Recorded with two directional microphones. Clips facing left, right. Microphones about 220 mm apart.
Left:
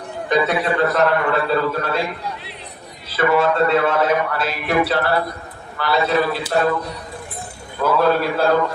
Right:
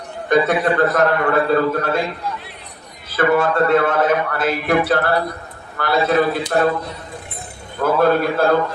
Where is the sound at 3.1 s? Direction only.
50° right (ahead or behind).